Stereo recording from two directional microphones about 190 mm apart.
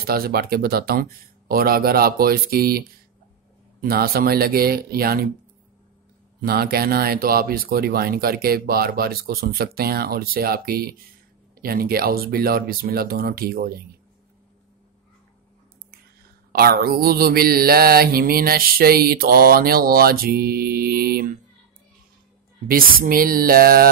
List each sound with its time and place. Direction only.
0.0 s mantra: 55° right (ahead or behind)
6.4 s mantra: 55° right (ahead or behind)
16.5 s mantra: 50° right (ahead or behind)
22.7 s mantra: 50° right (ahead or behind)